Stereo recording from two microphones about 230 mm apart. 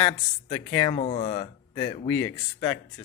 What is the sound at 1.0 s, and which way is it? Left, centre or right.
Speech, left.